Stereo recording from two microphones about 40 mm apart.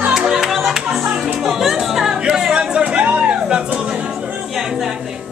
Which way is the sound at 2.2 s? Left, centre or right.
Centre.